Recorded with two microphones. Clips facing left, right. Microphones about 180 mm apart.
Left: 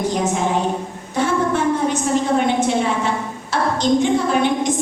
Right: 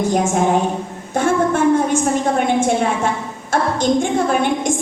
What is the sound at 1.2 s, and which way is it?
Speech, 50° right (ahead or behind).